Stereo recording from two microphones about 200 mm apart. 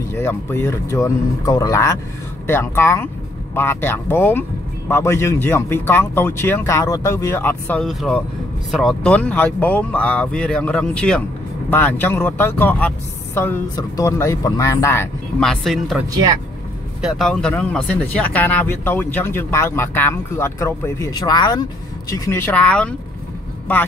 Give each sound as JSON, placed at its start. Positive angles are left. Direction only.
{"t": 0.1, "sound": "speech", "side_deg": 10}
{"t": 15.4, "sound": "speech", "side_deg": 0}
{"t": 17.0, "sound": "speech", "side_deg": 0}